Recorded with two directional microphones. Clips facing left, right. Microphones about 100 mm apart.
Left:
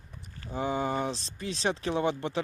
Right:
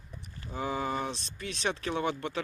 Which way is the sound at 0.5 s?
25° left (ahead or behind).